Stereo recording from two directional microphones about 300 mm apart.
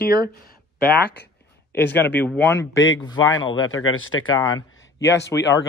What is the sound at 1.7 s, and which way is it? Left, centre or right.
Speech, left.